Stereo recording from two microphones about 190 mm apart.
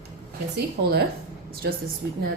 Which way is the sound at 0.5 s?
55° right (ahead or behind).